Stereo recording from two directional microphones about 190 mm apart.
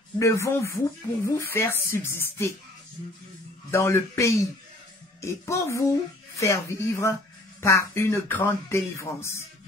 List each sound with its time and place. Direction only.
0.2 s speech: 15° left (ahead or behind)
3.7 s speech: 15° left (ahead or behind)